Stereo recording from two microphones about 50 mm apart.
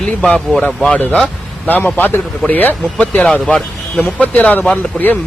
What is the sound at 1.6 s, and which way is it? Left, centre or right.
Speech, left.